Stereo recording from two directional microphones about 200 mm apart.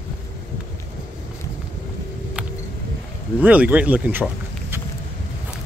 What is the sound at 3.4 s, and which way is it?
Speech, 10° right (ahead or behind).